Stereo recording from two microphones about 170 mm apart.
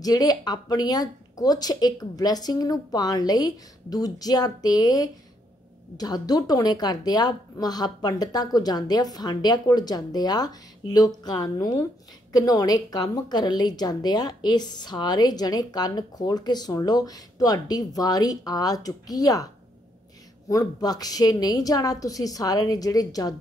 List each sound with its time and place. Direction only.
0.0 s a woman's voice: 20° left (ahead or behind)